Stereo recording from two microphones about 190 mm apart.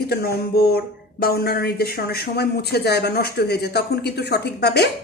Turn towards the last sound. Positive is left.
turn(degrees=60)  # may be behind; listen again after turning